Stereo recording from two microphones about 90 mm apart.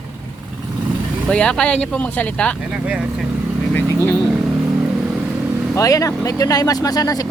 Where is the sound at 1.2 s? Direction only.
10° left (ahead or behind).